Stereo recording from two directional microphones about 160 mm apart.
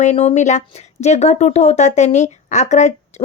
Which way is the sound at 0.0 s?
40° left (ahead or behind).